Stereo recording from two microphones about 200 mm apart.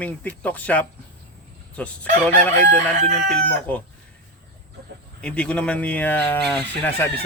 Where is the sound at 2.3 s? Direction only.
35° right (ahead or behind).